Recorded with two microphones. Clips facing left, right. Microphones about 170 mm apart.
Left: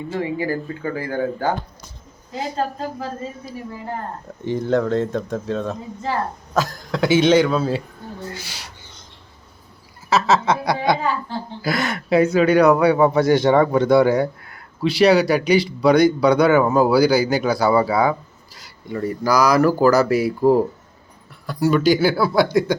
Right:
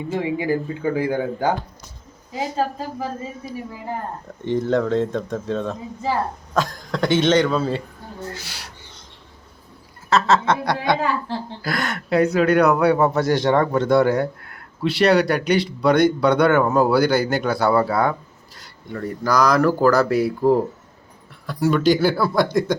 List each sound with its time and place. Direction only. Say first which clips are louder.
0.1 s speech: right 2 dB; 15° right (ahead or behind)
2.7 s speech: even; 15° right (ahead or behind)
4.4 s speech: even; centre (ahead or behind)
10.1 s speech: even; 5° left (ahead or behind)